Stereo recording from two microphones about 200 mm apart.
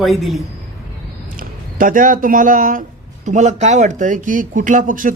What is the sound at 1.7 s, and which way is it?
Speech, 40° right (ahead or behind).